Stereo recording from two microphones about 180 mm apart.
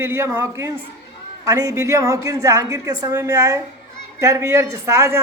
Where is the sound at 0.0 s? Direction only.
15° right (ahead or behind).